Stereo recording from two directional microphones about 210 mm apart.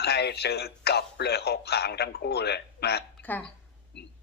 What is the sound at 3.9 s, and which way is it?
Speech, 55° left (ahead or behind).